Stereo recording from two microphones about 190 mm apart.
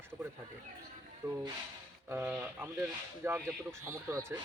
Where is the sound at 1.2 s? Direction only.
15° right (ahead or behind).